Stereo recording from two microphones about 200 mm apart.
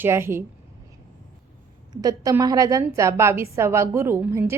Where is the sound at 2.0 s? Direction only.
15° right (ahead or behind).